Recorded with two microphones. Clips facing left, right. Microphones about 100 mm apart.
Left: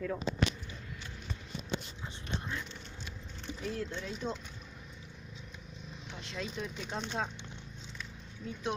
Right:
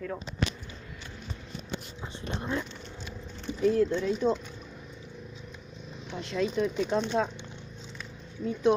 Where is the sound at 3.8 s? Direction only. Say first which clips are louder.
Right 13 dB; 90° right.